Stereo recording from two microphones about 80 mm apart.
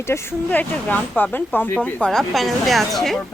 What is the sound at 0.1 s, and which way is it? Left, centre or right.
Speech, left.